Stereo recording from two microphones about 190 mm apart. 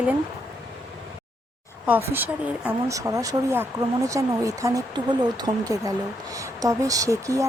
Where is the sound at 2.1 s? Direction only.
10° right (ahead or behind).